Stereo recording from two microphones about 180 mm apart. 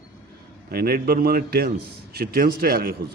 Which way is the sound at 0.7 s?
60° right (ahead or behind).